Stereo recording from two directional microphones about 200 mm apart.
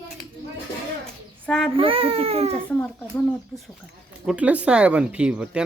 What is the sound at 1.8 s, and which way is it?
Speech, 30° right (ahead or behind).